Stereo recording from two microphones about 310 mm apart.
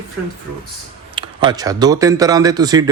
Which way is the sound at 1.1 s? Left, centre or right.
Centre.